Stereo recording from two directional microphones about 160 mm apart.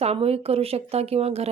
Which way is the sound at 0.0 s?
40° right (ahead or behind).